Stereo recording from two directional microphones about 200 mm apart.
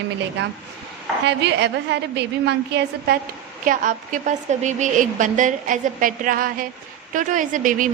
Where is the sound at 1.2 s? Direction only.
60° right (ahead or behind).